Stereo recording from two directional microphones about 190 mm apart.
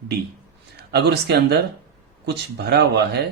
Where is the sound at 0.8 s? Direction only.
60° right (ahead or behind).